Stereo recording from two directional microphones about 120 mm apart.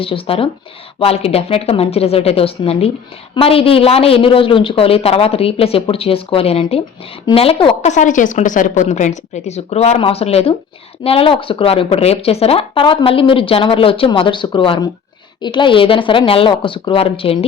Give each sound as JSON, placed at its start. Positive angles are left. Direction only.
{"t": 0.0, "sound": "a woman's voice", "side_deg": 50}
{"t": 7.8, "sound": "a woman's voice", "side_deg": 80}
{"t": 10.0, "sound": "a woman's voice", "side_deg": 55}